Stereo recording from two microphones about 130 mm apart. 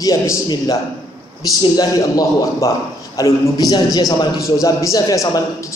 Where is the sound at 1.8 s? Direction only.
25° left (ahead or behind).